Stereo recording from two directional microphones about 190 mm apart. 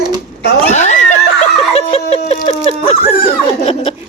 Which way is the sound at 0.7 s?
40° left (ahead or behind).